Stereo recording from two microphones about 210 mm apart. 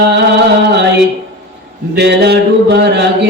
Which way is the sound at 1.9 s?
55° right (ahead or behind).